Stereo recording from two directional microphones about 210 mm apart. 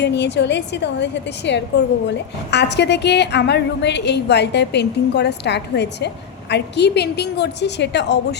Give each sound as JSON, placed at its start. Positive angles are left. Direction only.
{"t": 0.0, "sound": "a woman's voice", "side_deg": 55}